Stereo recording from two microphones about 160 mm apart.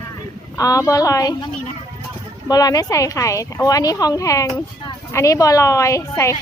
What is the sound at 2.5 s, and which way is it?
Speech, 25° left (ahead or behind).